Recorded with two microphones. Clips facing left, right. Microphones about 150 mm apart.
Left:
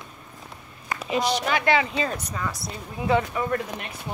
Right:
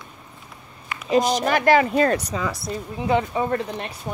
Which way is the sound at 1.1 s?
45° right (ahead or behind).